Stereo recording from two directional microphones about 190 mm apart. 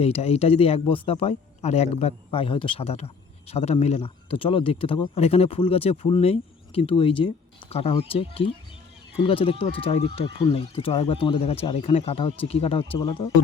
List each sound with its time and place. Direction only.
0.0 s speech: 30° left (ahead or behind)